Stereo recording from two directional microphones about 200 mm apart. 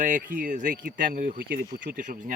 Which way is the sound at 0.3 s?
40° right (ahead or behind).